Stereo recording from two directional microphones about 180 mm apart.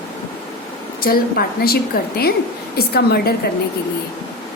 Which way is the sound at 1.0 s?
55° left (ahead or behind).